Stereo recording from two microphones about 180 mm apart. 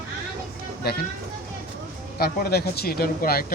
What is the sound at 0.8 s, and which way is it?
Speech, 60° left (ahead or behind).